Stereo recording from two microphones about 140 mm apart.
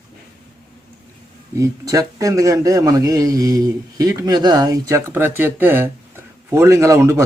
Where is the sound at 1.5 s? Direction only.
25° right (ahead or behind).